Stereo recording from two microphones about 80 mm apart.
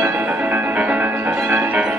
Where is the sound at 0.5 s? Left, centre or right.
Centre.